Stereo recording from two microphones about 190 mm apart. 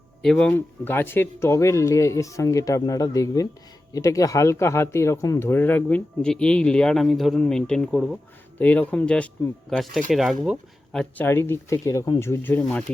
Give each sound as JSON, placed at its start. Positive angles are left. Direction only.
{"t": 0.2, "sound": "speech", "side_deg": 5}